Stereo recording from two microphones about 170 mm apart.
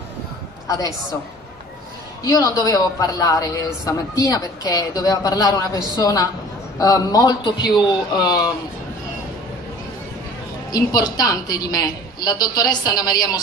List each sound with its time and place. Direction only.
2.2 s a man's voice: 20° left (ahead or behind)
10.7 s a man's voice: 20° left (ahead or behind)